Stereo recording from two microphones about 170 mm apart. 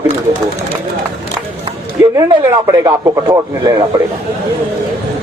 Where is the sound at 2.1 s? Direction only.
20° right (ahead or behind).